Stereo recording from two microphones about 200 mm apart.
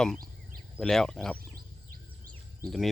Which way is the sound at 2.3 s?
Centre (ahead or behind).